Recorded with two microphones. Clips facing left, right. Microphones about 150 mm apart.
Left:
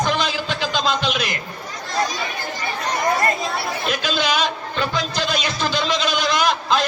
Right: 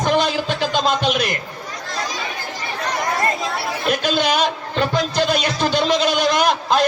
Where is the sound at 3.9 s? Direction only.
50° right (ahead or behind).